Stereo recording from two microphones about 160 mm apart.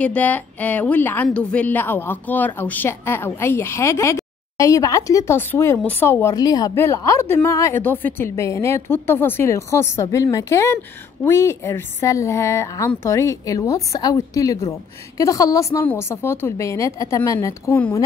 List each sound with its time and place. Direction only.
0.0 s a woman's voice: 10° left (ahead or behind)